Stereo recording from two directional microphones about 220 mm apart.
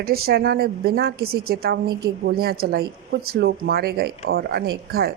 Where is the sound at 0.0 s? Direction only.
45° right (ahead or behind).